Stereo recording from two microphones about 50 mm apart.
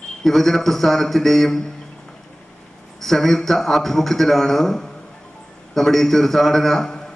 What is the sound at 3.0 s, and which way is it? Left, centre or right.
A man's voice, centre.